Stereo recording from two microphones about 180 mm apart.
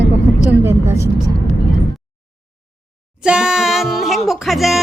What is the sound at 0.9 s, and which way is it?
Speech, 15° right (ahead or behind).